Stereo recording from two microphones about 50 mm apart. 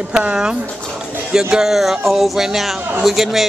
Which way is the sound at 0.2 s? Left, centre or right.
Centre.